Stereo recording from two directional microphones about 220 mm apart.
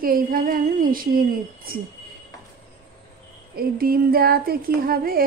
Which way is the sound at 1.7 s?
45° right (ahead or behind).